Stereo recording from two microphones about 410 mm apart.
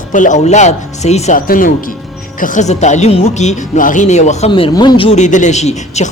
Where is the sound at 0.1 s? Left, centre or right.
Centre.